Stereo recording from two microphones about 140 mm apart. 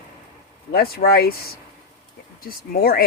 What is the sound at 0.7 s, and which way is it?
Speech, 90° left.